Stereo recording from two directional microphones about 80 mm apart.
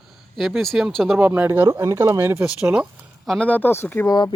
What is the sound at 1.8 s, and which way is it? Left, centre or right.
Speech, right.